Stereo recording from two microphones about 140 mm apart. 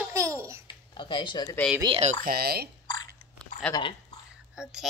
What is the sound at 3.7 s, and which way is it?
Speech, 35° left (ahead or behind).